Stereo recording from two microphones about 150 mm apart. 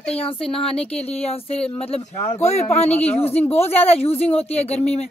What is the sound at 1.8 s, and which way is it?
Speech, 40° left (ahead or behind).